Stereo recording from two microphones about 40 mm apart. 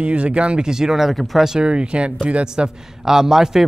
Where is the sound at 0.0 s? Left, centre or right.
Right.